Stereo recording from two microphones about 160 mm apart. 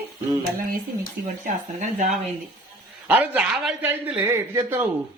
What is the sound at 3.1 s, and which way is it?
Speech, 10° right (ahead or behind).